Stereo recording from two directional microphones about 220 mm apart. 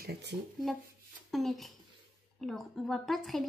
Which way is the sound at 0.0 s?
50° right (ahead or behind).